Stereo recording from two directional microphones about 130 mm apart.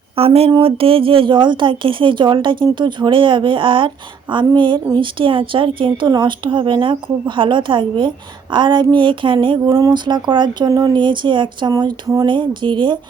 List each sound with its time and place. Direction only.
0.2 s a sound: 50° right (ahead or behind)
0.6 s speech: 45° right (ahead or behind)
9.6 s speech: 25° right (ahead or behind)